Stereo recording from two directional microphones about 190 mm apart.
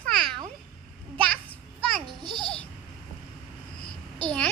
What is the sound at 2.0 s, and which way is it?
Babbling, 25° right (ahead or behind).